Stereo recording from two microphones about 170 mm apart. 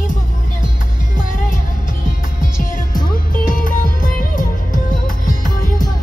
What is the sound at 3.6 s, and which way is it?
Music, 55° left (ahead or behind).